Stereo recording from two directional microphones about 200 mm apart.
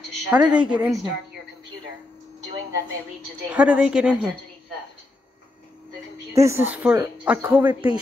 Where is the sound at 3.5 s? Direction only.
5° right (ahead or behind).